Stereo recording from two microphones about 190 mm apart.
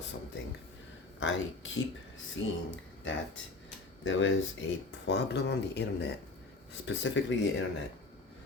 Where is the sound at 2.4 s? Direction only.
75° left (ahead or behind).